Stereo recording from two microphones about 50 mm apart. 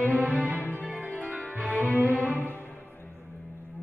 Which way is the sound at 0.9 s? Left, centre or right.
Right.